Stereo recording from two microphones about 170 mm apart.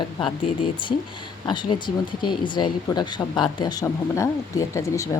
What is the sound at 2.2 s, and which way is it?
Speech, 25° left (ahead or behind).